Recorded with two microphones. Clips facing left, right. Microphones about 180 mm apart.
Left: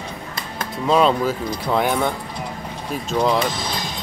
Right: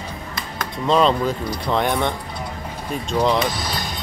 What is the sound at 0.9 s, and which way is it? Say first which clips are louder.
Speech: even; 5° left (ahead or behind).